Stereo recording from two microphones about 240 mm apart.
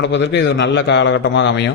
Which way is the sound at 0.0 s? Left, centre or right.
Left.